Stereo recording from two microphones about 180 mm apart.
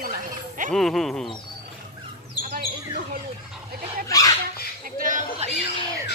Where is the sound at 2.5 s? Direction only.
50° right (ahead or behind).